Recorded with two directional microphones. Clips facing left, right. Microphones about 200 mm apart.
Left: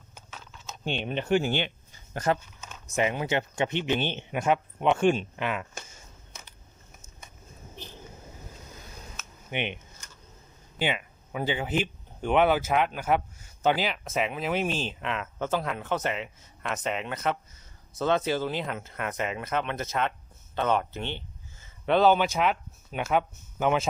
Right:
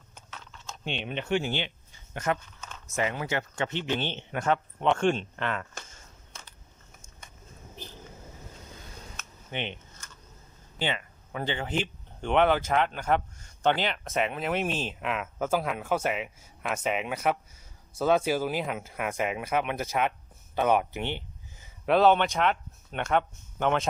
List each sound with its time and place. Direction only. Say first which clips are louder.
0.1 s mechanisms: even; 5° left (ahead or behind)
0.9 s speech: left 3 dB; 40° left (ahead or behind)
2.1 s speech: left 3 dB; 35° left (ahead or behind)
2.6 s a sound: right 1 dB; 10° left (ahead or behind)
2.9 s speech: left 3 dB; 20° left (ahead or behind)
9.1 s a sound: left 3 dB; 15° left (ahead or behind)
10.8 s speech: left 2 dB; 10° left (ahead or behind); by 21.7 s 15° right (ahead or behind)
21.8 s speech: even; centre (ahead or behind)